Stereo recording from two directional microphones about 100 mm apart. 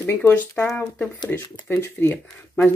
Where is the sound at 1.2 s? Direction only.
20° left (ahead or behind).